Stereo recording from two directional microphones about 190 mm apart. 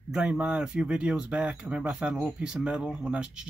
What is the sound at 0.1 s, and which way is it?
Speech, 5° right (ahead or behind).